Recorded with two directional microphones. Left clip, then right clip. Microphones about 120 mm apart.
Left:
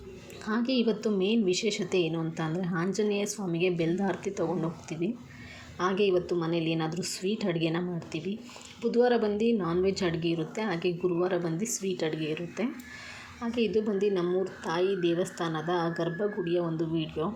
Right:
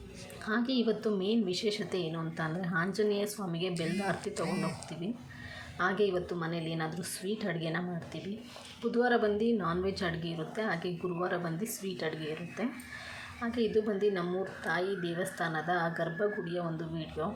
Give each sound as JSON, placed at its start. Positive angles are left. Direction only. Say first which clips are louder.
{"t": 0.4, "sound": "a woman's voice", "louder": "left 3 dB", "side_deg": 25}
{"t": 5.7, "sound": "a woman's voice", "louder": "left 4 dB", "side_deg": 20}